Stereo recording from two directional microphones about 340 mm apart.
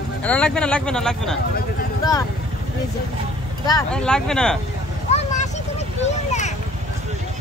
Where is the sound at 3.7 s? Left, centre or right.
Centre.